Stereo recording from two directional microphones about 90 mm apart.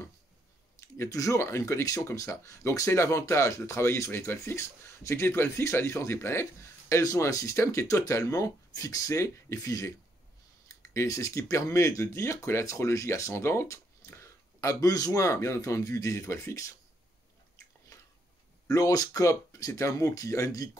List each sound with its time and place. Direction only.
0.7 s speech: 35° left (ahead or behind)
18.7 s speech: 40° left (ahead or behind)